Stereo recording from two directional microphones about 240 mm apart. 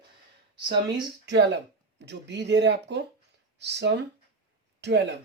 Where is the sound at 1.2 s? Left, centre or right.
Right.